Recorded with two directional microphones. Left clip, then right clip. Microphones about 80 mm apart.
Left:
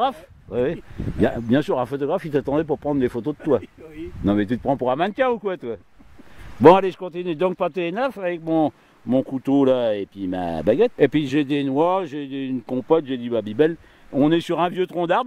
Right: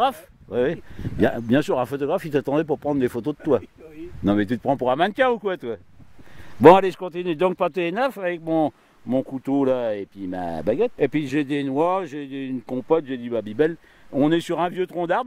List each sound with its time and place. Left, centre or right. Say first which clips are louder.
0.0 s speech: right 1 dB; right
9.1 s speech: left 3 dB; centre
10.8 s speech: left 5 dB; centre
11.1 s speech: left 2 dB; centre